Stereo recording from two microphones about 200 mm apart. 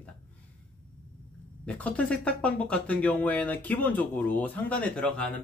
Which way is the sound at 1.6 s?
5° left (ahead or behind).